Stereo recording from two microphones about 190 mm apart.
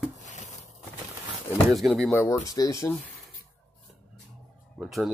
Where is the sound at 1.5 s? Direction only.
Centre (ahead or behind).